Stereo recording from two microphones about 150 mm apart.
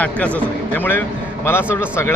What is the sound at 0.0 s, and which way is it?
A man's voice, 10° left (ahead or behind).